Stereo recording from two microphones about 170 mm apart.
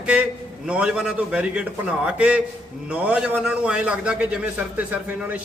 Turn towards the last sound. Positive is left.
turn(degrees=-10)  # may be behind; listen again after turning